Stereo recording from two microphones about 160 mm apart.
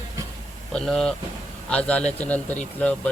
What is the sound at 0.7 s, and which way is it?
A man's voice, 5° left (ahead or behind).